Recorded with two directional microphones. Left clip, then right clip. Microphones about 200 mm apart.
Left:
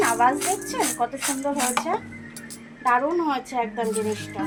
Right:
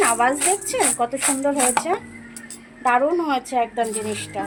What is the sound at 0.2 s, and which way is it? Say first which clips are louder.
Speech: right 1 dB; 55° right (ahead or behind).